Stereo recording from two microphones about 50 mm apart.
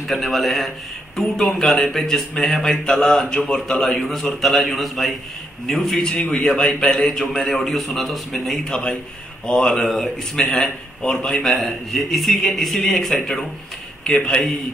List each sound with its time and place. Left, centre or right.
0.0 s a man's voice: centre
11.4 s a man's voice: centre